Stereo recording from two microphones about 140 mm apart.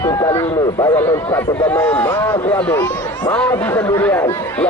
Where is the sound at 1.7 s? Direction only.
15° left (ahead or behind).